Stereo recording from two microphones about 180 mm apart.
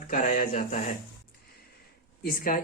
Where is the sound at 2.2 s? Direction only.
50° left (ahead or behind).